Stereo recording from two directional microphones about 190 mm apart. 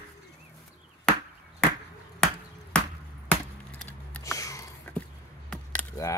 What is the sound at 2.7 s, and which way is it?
Chop, 5° left (ahead or behind).